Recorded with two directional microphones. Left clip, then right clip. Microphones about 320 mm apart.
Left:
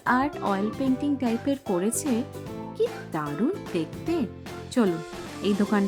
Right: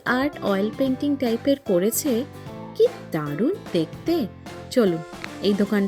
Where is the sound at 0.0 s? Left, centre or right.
Centre.